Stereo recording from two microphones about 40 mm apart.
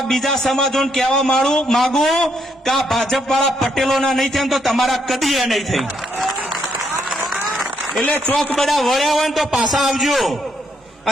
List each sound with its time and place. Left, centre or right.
0.1 s a man's voice: centre
8.0 s a man's voice: left
8.5 s a man's voice: centre